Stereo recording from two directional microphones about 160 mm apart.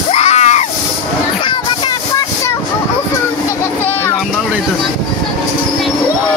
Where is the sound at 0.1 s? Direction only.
45° left (ahead or behind).